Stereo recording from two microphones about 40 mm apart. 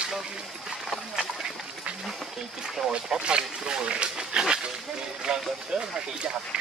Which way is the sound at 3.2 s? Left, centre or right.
Right.